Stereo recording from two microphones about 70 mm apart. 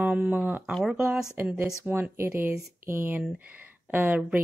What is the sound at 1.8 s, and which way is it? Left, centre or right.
Speech, right.